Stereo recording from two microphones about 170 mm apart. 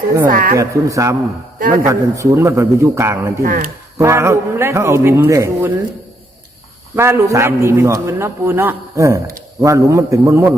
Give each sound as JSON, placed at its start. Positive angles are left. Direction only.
{"t": 0.3, "sound": "speech", "side_deg": -55}
{"t": 0.5, "sound": "a man's voice", "side_deg": -20}
{"t": 3.4, "sound": "speech", "side_deg": -55}
{"t": 3.9, "sound": "a man's voice", "side_deg": -15}
{"t": 6.9, "sound": "a man's voice", "side_deg": -15}